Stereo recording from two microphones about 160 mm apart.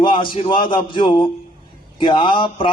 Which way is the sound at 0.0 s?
30° left (ahead or behind).